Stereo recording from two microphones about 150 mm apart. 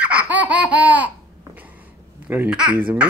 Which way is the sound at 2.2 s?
10° right (ahead or behind).